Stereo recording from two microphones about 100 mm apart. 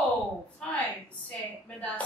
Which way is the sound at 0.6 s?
15° left (ahead or behind).